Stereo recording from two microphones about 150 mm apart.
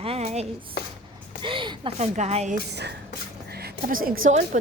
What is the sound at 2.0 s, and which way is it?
Speech, 45° right (ahead or behind).